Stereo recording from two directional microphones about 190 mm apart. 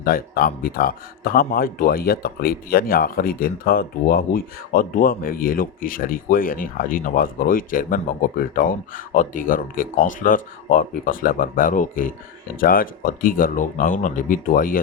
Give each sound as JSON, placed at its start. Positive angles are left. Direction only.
{"t": 0.0, "sound": "speech", "side_deg": 50}